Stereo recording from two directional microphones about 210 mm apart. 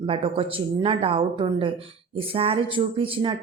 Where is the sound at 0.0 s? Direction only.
25° right (ahead or behind).